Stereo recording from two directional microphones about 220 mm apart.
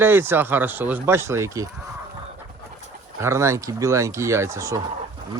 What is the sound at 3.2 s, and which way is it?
Speech, 10° right (ahead or behind).